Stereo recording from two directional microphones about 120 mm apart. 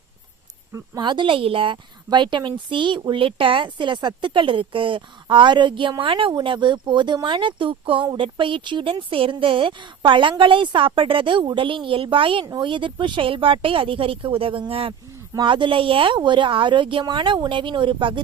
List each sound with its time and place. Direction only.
0.7 s a woman's voice: 35° right (ahead or behind)